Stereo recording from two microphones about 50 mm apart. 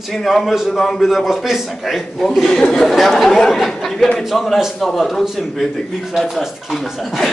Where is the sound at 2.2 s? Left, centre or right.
Centre.